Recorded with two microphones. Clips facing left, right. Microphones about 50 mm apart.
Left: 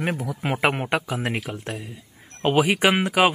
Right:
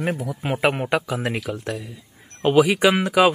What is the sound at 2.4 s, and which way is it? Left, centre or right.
Speech, left.